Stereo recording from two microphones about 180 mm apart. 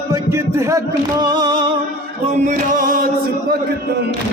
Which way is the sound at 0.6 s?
20° right (ahead or behind).